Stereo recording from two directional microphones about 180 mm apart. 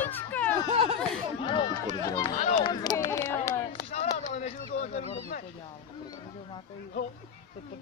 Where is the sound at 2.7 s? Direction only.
25° left (ahead or behind).